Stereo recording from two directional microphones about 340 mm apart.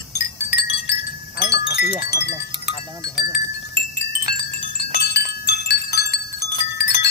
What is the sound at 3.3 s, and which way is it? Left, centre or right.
Wind chime, left.